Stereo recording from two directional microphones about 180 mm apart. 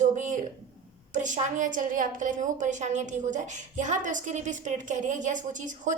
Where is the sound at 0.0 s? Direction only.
45° right (ahead or behind).